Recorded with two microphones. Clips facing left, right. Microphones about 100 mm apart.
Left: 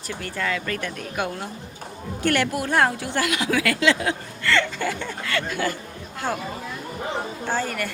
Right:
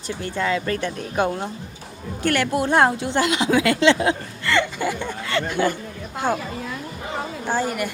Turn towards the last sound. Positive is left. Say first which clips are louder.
# right 3 dB
turn(degrees=-15)  # may be behind; listen again after turning